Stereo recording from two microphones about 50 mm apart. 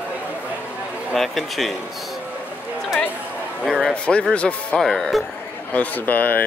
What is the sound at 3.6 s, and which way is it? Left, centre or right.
Speech, centre.